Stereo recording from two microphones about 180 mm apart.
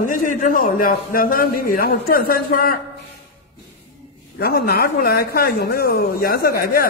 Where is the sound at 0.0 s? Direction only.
45° left (ahead or behind).